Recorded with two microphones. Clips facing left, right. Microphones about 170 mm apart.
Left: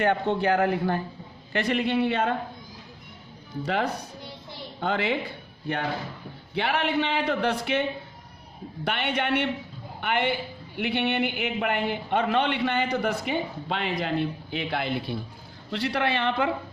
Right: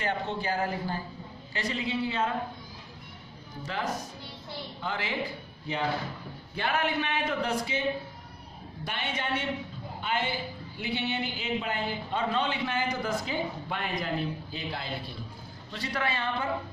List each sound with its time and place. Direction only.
0.0 s a man's voice: 60° left (ahead or behind)
3.6 s a man's voice: 65° left (ahead or behind)
6.6 s a man's voice: 70° left (ahead or behind)